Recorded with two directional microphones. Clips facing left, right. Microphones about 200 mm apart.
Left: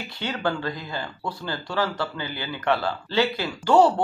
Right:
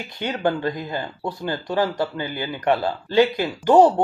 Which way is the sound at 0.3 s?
20° right (ahead or behind).